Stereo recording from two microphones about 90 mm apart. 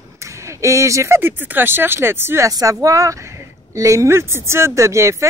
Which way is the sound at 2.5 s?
40° right (ahead or behind).